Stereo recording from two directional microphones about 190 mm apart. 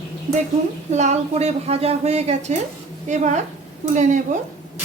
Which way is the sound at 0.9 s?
35° right (ahead or behind).